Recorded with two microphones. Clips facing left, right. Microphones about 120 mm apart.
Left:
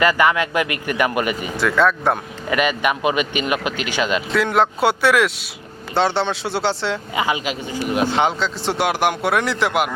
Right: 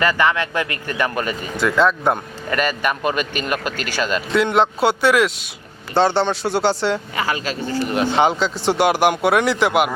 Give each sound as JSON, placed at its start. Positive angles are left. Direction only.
{"t": 0.0, "sound": "speech", "side_deg": 15}
{"t": 1.5, "sound": "speech", "side_deg": 0}
{"t": 2.5, "sound": "speech", "side_deg": 10}
{"t": 4.4, "sound": "speech", "side_deg": 0}
{"t": 7.2, "sound": "speech", "side_deg": 15}
{"t": 7.9, "sound": "speech", "side_deg": 5}